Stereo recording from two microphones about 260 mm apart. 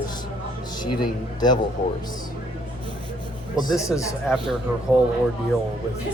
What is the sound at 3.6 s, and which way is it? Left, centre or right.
Speech, centre.